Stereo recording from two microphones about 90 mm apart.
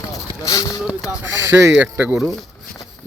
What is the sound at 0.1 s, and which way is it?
Clip-clop, 40° left (ahead or behind).